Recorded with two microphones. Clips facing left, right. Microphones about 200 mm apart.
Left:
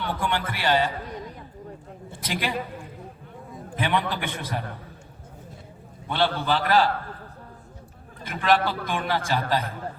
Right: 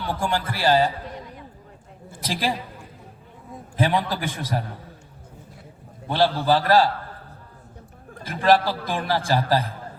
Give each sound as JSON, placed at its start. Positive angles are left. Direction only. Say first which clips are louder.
{"t": 0.0, "sound": "a man's voice", "louder": "right 2 dB", "side_deg": -35}
{"t": 2.2, "sound": "a man's voice", "louder": "right 3 dB", "side_deg": -35}
{"t": 3.8, "sound": "a man's voice", "louder": "right 3 dB", "side_deg": -35}
{"t": 6.1, "sound": "a man's voice", "louder": "right 4 dB", "side_deg": -35}
{"t": 8.2, "sound": "a man's voice", "louder": "right 3 dB", "side_deg": -35}